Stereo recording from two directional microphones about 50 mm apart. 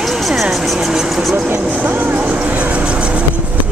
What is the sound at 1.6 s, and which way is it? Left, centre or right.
Speech, right.